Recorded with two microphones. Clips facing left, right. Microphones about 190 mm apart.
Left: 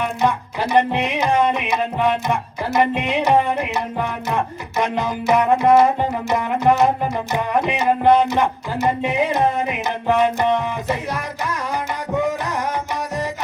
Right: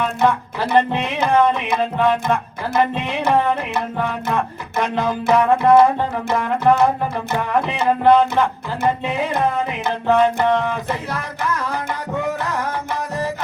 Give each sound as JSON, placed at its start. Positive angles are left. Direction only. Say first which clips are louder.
{"t": 0.0, "sound": "music", "louder": "right 2 dB", "side_deg": 15}